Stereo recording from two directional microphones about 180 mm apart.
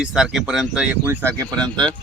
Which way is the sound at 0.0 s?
Centre (ahead or behind).